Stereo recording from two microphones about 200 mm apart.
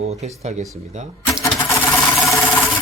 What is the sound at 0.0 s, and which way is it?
Speech, 30° right (ahead or behind).